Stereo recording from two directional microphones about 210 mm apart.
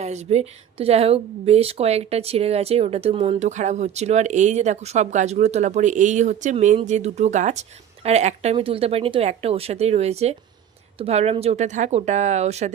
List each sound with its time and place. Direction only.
0.0 s speech: 30° right (ahead or behind)